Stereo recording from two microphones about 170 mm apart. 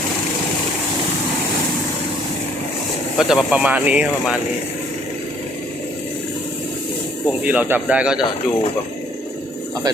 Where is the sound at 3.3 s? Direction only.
5° right (ahead or behind).